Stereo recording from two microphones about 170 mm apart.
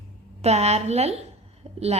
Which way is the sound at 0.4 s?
40° right (ahead or behind).